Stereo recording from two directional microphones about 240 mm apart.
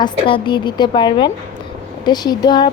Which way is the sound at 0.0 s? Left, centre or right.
Centre.